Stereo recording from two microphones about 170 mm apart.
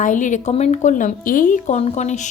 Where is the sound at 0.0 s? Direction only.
50° left (ahead or behind).